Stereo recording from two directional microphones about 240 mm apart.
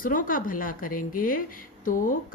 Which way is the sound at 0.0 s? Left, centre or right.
Left.